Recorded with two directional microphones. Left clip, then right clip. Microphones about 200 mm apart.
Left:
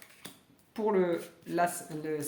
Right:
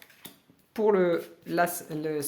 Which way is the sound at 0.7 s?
50° right (ahead or behind).